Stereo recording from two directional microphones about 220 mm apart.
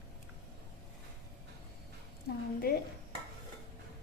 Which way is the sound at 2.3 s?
45° left (ahead or behind).